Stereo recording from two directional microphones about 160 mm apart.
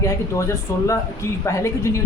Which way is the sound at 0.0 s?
20° left (ahead or behind).